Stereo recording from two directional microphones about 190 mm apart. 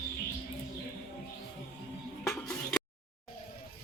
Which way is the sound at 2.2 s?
10° left (ahead or behind).